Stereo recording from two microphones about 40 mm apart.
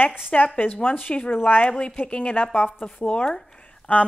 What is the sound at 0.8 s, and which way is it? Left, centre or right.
A woman's voice, left.